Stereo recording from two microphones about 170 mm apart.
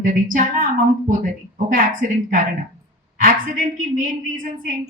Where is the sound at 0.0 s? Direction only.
50° right (ahead or behind).